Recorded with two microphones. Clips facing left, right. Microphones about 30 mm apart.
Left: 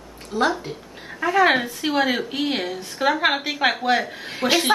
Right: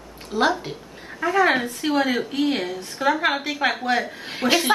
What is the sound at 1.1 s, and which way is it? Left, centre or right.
A woman's voice, centre.